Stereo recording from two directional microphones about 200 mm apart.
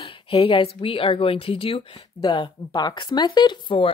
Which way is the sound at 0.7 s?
25° left (ahead or behind).